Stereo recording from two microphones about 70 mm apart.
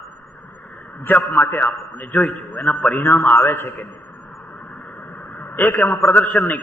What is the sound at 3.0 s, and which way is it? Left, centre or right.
Speech, left.